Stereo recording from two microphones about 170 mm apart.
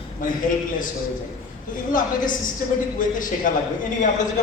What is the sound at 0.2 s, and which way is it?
Speech, 50° left (ahead or behind).